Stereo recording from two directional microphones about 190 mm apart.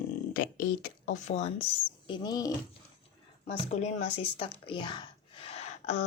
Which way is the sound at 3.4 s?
35° left (ahead or behind).